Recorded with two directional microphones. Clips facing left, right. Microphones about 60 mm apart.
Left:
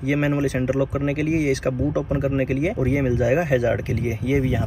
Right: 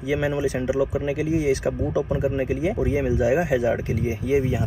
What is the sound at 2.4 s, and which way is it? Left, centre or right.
Speech, left.